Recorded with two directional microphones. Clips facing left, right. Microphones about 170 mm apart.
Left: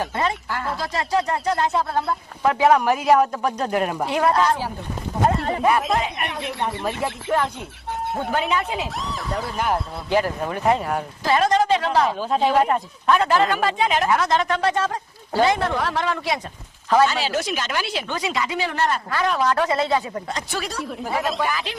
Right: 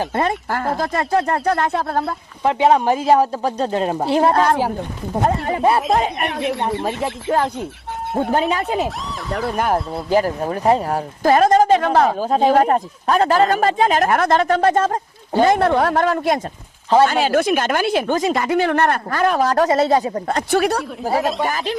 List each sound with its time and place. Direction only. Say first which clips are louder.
0.2 s speech: right 6 dB; 45° right (ahead or behind)
2.4 s speech: right 2 dB; 25° right (ahead or behind)
4.4 s speech: right 4 dB; 55° right (ahead or behind)
6.2 s speech: right 6 dB; centre (ahead or behind)
8.3 s speech: right 4 dB; 40° right (ahead or behind)
9.3 s speech: right 5 dB; 55° right (ahead or behind)
10.1 s speech: right 4 dB; 40° right (ahead or behind)
11.2 s speech: right 6 dB; 45° right (ahead or behind)
20.2 s speech: right 11 dB; 60° right (ahead or behind)
21.0 s speech: right 3 dB; 40° right (ahead or behind)